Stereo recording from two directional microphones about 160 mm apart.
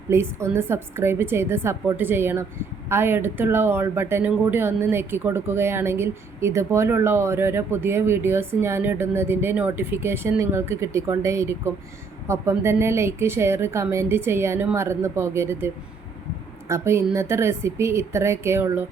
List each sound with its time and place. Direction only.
0.1 s speech: 15° right (ahead or behind)